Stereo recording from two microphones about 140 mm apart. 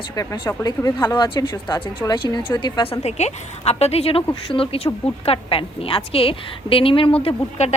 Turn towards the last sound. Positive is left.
turn(degrees=50)  # may be behind; listen again after turning